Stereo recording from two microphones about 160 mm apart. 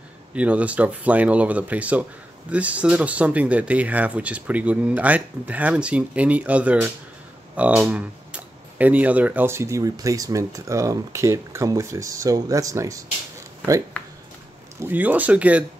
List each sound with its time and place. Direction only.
0.3 s speech: 10° right (ahead or behind)
14.8 s speech: 10° right (ahead or behind)